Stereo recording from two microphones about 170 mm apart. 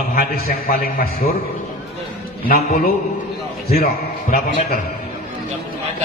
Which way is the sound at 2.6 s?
55° left (ahead or behind).